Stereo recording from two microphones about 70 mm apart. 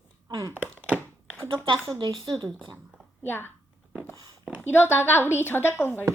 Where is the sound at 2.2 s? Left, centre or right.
Right.